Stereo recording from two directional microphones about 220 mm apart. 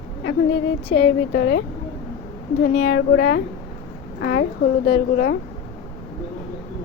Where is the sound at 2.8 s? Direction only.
50° left (ahead or behind).